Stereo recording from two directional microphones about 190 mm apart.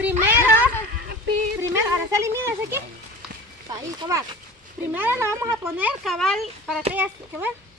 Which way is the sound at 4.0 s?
25° right (ahead or behind).